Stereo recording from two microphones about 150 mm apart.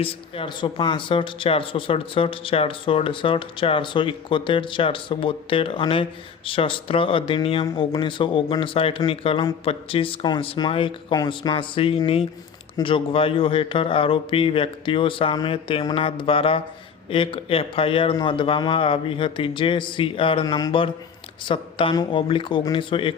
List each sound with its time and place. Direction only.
0.0 s speech: 35° left (ahead or behind)